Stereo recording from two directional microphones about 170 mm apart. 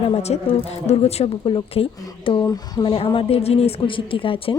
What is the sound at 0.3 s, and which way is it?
A man's voice, 35° left (ahead or behind).